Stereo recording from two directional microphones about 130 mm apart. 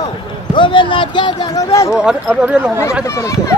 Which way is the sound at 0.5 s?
40° left (ahead or behind).